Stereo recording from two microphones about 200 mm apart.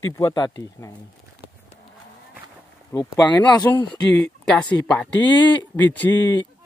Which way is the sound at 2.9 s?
20° left (ahead or behind).